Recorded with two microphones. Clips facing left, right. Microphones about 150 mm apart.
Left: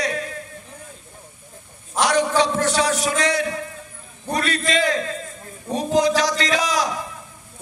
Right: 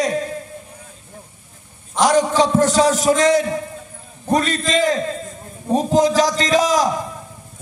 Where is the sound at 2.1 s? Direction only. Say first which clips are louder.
Right 4 dB; 40° right (ahead or behind).